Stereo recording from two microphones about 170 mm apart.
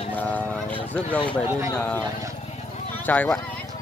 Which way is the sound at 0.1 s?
10° left (ahead or behind).